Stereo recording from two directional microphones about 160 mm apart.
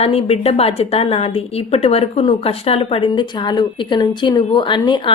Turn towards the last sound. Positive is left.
turn(degrees=30)  # may be behind; listen again after turning